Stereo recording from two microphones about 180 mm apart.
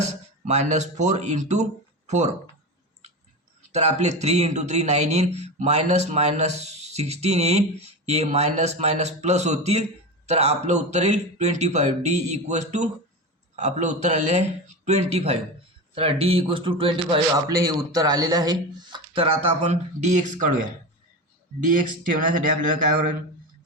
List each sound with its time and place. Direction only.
0.0 s speech: 40° right (ahead or behind)
3.7 s speech: 40° right (ahead or behind)
21.7 s speech: 50° right (ahead or behind)